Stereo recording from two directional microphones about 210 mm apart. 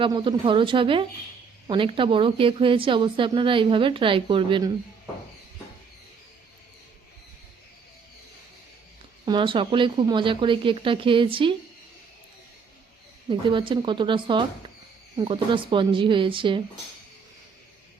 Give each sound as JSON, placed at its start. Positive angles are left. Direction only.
{"t": 0.0, "sound": "a woman's voice", "side_deg": -20}
{"t": 9.2, "sound": "a woman's voice", "side_deg": -20}
{"t": 13.3, "sound": "a woman's voice", "side_deg": -25}